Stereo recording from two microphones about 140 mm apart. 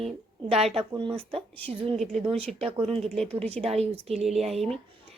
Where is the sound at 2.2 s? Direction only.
45° right (ahead or behind).